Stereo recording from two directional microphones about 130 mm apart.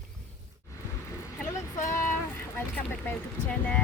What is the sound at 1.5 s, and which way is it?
Vehicle, 25° left (ahead or behind).